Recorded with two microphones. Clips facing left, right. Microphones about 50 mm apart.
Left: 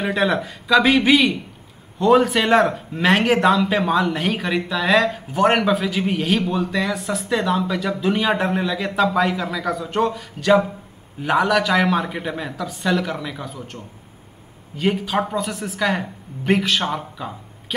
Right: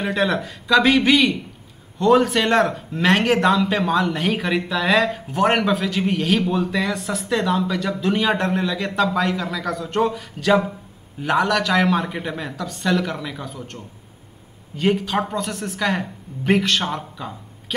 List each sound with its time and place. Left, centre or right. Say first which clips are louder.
0.0 s a man's voice: left 1 dB; centre